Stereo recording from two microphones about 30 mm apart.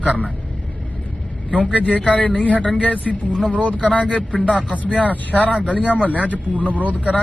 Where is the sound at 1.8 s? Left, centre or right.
Left.